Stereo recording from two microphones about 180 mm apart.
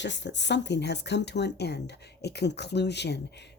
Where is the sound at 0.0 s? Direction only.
80° left.